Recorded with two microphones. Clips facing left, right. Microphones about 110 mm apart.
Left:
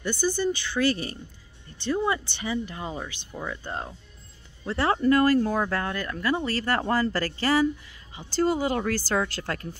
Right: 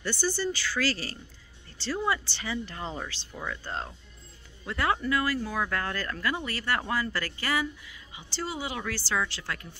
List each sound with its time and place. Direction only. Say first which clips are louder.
0.0 s speech: left 4 dB; 15° left (ahead or behind)
4.6 s speech: left 6 dB; 30° left (ahead or behind)
5.7 s speech: left 3 dB; 20° left (ahead or behind)
6.3 s speech: left 5 dB; 35° left (ahead or behind)